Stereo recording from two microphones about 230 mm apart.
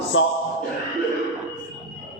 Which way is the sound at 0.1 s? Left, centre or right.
Left.